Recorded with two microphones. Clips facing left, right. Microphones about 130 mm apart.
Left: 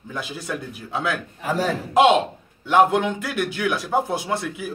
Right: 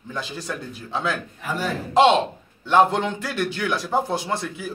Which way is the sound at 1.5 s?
90° left.